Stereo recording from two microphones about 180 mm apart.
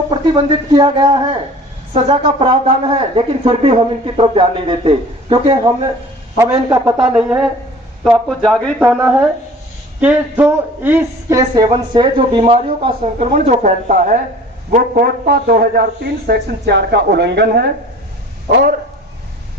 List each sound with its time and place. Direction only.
0.1 s a man's voice: 25° right (ahead or behind)
6.3 s a man's voice: 15° right (ahead or behind)
7.0 s speech: 5° right (ahead or behind)
9.0 s a man's voice: 5° right (ahead or behind); by 14.2 s 45° right (ahead or behind)
14.8 s a man's voice: 60° right (ahead or behind)